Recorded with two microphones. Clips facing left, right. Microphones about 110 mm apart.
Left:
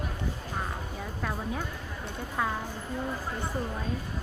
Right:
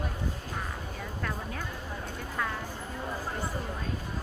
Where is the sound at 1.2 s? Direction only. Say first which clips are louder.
Left 4 dB; 10° left (ahead or behind).